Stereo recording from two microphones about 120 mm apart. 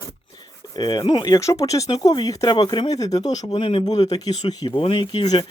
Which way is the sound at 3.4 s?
45° left (ahead or behind).